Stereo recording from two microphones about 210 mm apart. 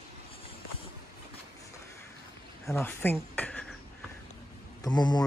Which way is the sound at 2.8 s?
10° left (ahead or behind).